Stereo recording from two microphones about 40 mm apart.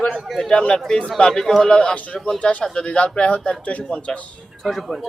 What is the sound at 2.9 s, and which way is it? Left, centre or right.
A man's voice, left.